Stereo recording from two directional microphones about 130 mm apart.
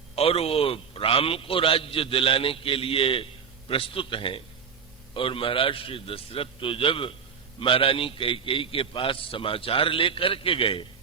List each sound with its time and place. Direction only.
0.2 s a man's voice: 50° left (ahead or behind)